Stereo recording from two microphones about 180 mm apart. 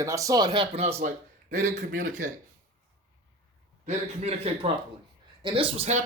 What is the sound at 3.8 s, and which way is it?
A man's voice, 35° right (ahead or behind).